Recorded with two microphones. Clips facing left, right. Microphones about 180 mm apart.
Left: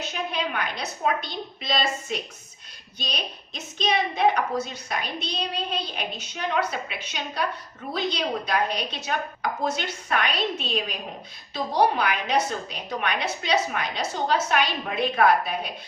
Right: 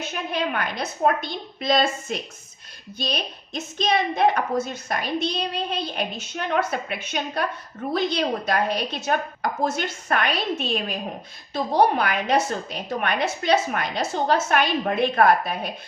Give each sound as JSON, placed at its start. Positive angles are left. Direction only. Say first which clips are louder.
{"t": 0.0, "sound": "a woman's voice", "louder": "right 2 dB", "side_deg": -50}